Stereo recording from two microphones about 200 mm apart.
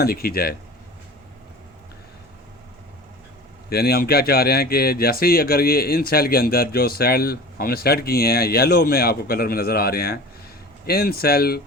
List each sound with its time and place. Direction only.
0.0 s speech: 50° left (ahead or behind)
3.7 s speech: 50° left (ahead or behind)